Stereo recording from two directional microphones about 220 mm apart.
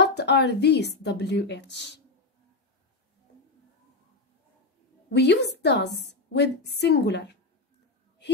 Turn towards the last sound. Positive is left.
turn(degrees=50)  # may be behind; listen again after turning